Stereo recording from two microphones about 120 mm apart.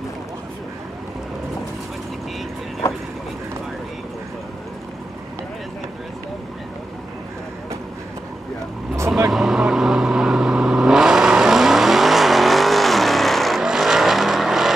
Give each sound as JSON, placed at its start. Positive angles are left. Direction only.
{"t": 2.8, "sound": "vehicle", "side_deg": 25}
{"t": 9.3, "sound": "vehicle", "side_deg": -5}